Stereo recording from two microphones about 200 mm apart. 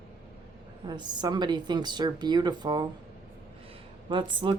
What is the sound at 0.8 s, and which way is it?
A woman's voice, 20° right (ahead or behind).